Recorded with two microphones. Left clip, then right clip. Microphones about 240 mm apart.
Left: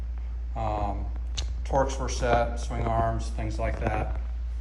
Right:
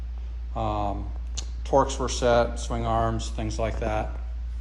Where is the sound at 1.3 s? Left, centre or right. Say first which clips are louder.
Right 4 dB; centre.